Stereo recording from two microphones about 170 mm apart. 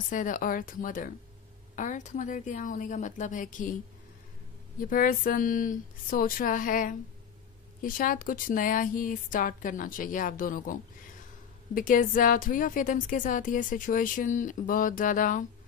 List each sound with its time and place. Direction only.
0.1 s speech: 50° left (ahead or behind)
4.7 s speech: 55° left (ahead or behind)